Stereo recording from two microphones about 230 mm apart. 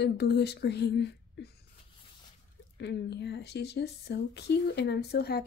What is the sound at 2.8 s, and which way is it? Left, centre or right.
Speech, left.